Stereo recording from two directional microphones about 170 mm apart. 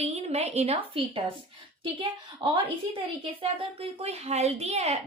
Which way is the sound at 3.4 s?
35° right (ahead or behind).